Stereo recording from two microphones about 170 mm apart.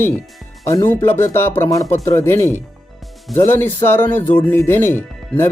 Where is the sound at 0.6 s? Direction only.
20° left (ahead or behind).